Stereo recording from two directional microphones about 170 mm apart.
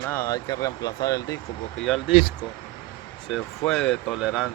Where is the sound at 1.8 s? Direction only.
Centre (ahead or behind).